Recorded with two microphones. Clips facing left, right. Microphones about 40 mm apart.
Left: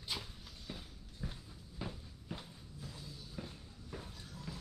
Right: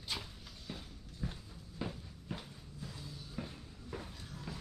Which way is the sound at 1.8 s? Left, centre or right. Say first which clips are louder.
Right 3 dB; centre.